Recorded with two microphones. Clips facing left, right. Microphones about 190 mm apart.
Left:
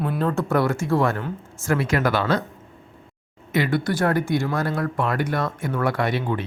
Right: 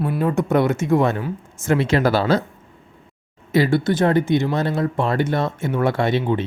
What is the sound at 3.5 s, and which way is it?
Speech, 30° right (ahead or behind).